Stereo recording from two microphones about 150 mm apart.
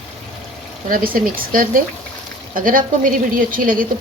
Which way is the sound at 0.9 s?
70° right (ahead or behind).